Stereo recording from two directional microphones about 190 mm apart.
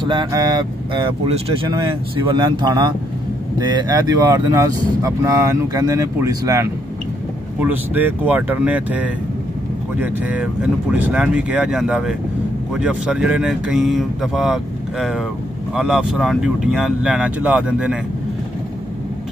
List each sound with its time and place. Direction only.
0.0 s speech: 25° right (ahead or behind); by 17.9 s 5° right (ahead or behind)